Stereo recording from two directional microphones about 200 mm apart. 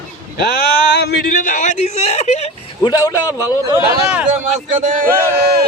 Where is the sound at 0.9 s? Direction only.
55° left (ahead or behind); by 2.9 s 30° left (ahead or behind).